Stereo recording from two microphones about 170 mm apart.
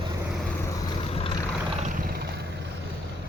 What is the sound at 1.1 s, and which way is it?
Vehicle, 35° left (ahead or behind).